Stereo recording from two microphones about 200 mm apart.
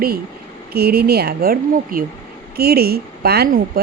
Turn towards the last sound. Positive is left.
turn(degrees=-50)  # may be behind; listen again after turning